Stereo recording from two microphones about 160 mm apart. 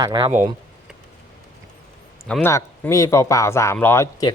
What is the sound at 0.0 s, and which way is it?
Speech, 30° right (ahead or behind).